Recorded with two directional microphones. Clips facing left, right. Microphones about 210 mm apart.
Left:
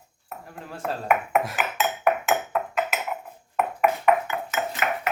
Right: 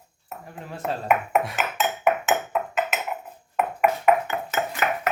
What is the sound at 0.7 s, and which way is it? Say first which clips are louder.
Dishes: right 1 dB; centre (ahead or behind).